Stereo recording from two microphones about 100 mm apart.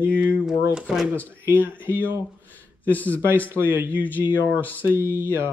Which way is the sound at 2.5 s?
15° left (ahead or behind).